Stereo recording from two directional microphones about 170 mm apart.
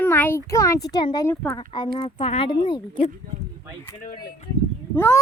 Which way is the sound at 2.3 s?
35° left (ahead or behind).